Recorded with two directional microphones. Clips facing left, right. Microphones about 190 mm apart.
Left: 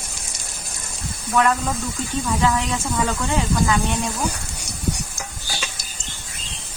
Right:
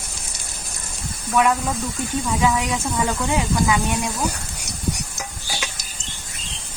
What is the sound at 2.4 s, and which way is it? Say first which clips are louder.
Speech: right 1 dB; 15° right (ahead or behind).